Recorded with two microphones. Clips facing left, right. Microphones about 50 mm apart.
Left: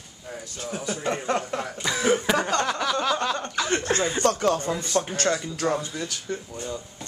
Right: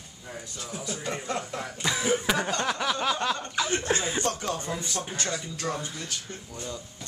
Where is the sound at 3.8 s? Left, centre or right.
Centre.